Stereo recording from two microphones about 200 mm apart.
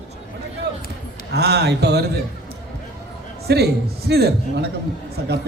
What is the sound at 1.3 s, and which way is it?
Speech, 55° right (ahead or behind).